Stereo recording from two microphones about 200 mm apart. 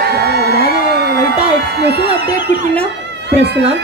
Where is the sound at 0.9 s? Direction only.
55° right (ahead or behind).